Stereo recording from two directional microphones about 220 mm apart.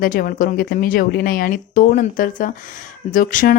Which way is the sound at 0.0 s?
40° left (ahead or behind).